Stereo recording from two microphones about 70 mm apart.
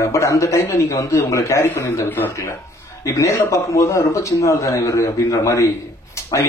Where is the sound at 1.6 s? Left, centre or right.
Left.